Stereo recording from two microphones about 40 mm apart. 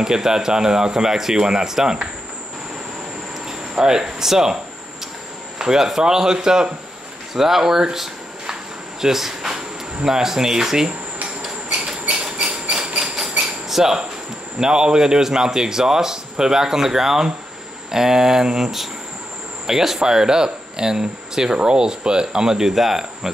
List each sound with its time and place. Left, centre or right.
0.0 s speech: centre
3.4 s speech: centre
5.6 s speech: centre
11.4 s a sound: centre
13.0 s a sound: centre
14.6 s speech: centre